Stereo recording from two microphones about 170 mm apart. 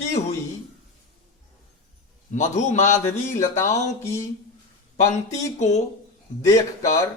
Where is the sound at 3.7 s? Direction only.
40° left (ahead or behind).